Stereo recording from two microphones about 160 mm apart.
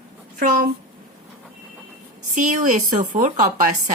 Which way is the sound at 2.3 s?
50° right (ahead or behind).